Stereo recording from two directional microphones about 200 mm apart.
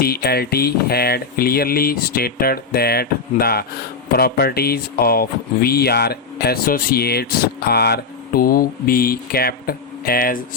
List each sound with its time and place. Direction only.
0.0 s speech: 50° left (ahead or behind)